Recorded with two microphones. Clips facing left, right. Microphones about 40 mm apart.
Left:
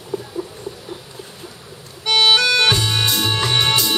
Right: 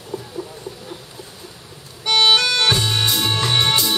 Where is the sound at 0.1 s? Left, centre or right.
Centre.